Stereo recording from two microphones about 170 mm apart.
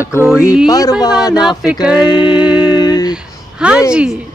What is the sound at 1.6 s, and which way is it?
Speech, 5° right (ahead or behind).